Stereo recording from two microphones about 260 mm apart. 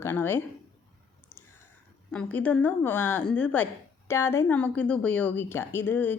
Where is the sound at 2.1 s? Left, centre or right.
Centre.